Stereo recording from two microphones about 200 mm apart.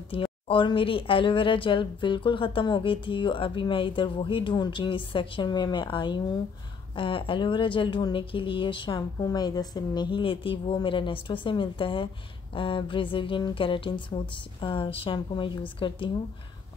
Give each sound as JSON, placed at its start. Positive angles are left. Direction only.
{"t": 0.1, "sound": "speech", "side_deg": 25}